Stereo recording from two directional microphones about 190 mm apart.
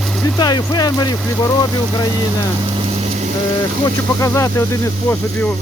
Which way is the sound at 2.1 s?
25° right (ahead or behind).